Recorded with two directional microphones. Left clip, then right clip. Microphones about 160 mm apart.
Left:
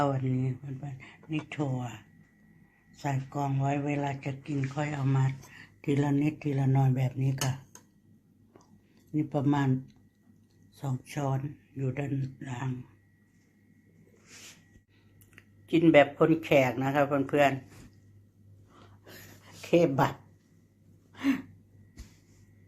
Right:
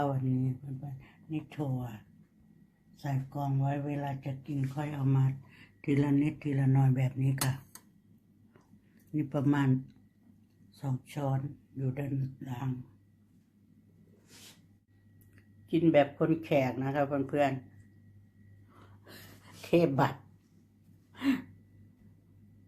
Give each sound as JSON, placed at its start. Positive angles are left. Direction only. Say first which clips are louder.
{"t": 0.0, "sound": "speech", "louder": "left 3 dB", "side_deg": 5}
{"t": 3.0, "sound": "speech", "louder": "left 5 dB", "side_deg": 10}
{"t": 5.9, "sound": "speech", "louder": "left 1 dB", "side_deg": 15}
{"t": 9.1, "sound": "speech", "louder": "left 2 dB", "side_deg": 0}
{"t": 15.4, "sound": "speech", "louder": "left 4 dB", "side_deg": 5}
{"t": 18.7, "sound": "a sound", "louder": "left 2 dB", "side_deg": 5}
{"t": 19.6, "sound": "speech", "louder": "left 2 dB", "side_deg": 5}
{"t": 21.1, "sound": "gasp", "louder": "left 2 dB", "side_deg": 0}